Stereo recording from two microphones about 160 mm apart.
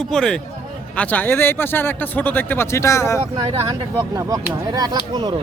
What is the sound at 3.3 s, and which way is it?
Speech, 30° right (ahead or behind).